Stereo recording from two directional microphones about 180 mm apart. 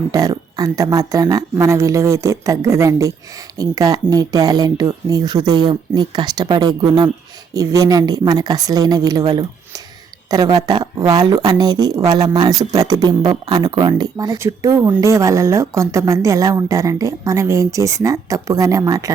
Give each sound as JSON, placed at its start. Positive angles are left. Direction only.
{"t": 0.1, "sound": "speech", "side_deg": -20}
{"t": 10.2, "sound": "speech", "side_deg": -20}